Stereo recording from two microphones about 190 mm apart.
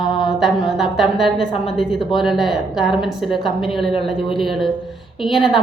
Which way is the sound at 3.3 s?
25° left (ahead or behind).